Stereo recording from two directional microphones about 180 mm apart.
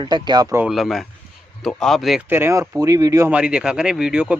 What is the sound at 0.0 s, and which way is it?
Speech, 25° right (ahead or behind).